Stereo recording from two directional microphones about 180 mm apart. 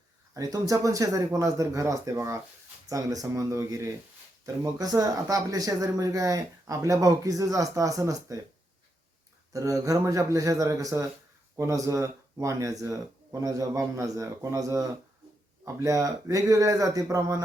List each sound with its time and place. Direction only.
0.3 s speech: 20° right (ahead or behind)
9.5 s speech: 20° right (ahead or behind)